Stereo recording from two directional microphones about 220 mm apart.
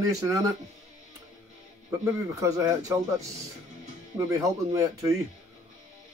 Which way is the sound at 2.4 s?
15° right (ahead or behind).